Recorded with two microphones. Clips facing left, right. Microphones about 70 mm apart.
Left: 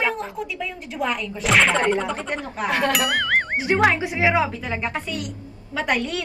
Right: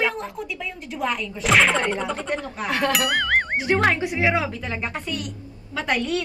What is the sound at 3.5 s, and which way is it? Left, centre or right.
Speech, centre.